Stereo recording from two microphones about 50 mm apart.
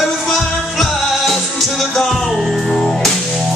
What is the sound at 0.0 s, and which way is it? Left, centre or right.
Music, centre.